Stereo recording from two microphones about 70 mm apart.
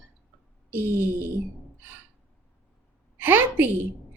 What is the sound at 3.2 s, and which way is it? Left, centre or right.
Speech, right.